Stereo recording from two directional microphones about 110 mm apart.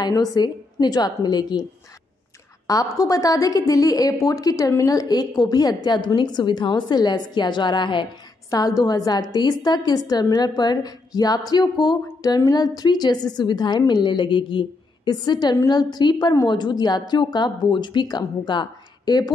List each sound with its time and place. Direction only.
0.0 s a woman's voice: 35° left (ahead or behind)
8.5 s a woman's voice: 35° left (ahead or behind)